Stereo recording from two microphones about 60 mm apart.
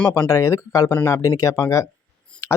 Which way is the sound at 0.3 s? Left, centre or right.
Left.